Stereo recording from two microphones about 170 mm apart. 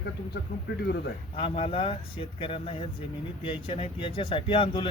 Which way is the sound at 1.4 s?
30° left (ahead or behind).